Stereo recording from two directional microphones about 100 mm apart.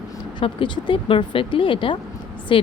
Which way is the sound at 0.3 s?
55° left (ahead or behind).